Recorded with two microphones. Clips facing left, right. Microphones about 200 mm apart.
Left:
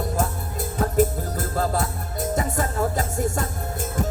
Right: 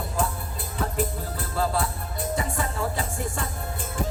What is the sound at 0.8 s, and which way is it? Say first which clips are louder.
Music: left 7 dB; 45° left (ahead or behind).